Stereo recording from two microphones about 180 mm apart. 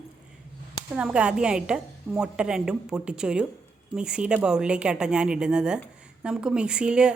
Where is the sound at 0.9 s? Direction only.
5° right (ahead or behind).